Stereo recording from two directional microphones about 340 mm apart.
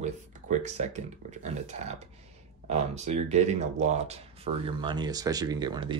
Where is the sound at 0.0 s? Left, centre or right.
Right.